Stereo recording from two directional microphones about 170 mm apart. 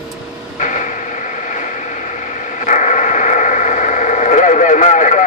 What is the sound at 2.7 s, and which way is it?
Radio, 45° left (ahead or behind).